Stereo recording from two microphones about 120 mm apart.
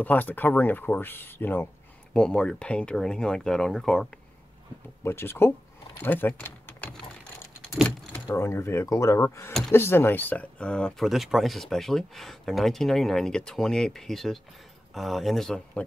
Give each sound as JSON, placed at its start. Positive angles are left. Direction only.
{"t": 0.0, "sound": "speech", "side_deg": 15}
{"t": 2.1, "sound": "speech", "side_deg": 5}
{"t": 5.0, "sound": "speech", "side_deg": 20}
{"t": 7.7, "sound": "vehicle", "side_deg": 0}
{"t": 8.3, "sound": "speech", "side_deg": 25}